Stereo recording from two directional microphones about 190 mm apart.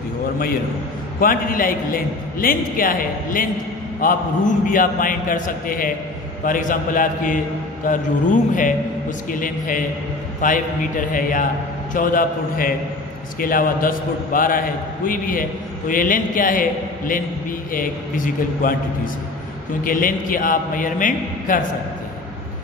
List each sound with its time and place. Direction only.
1.2 s a man's voice: 50° left (ahead or behind)
19.8 s a man's voice: 45° left (ahead or behind)